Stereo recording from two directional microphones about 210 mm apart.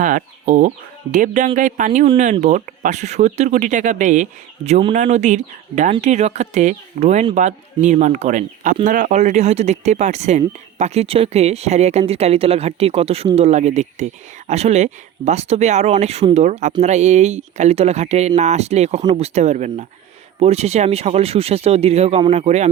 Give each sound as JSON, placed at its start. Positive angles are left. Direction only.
{"t": 0.0, "sound": "speech", "side_deg": -35}